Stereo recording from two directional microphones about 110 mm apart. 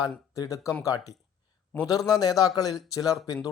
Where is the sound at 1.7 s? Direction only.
15° left (ahead or behind).